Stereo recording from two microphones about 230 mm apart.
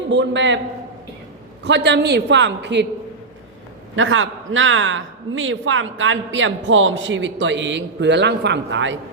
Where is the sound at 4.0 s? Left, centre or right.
Right.